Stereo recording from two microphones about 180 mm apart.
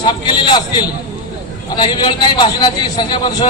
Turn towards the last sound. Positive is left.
turn(degrees=25)  # may be behind; listen again after turning